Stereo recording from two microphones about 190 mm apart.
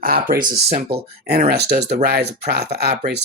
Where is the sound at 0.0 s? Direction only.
50° right (ahead or behind).